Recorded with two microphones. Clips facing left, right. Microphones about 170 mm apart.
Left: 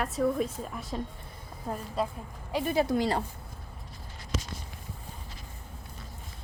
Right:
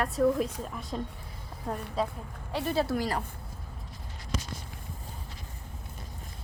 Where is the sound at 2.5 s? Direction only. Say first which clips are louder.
Left 2 dB; 15° left (ahead or behind).